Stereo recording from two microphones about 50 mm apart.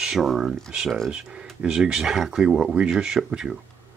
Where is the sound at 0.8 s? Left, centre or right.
Centre.